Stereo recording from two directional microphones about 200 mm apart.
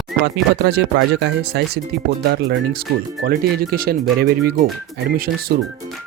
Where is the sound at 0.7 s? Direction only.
60° right (ahead or behind).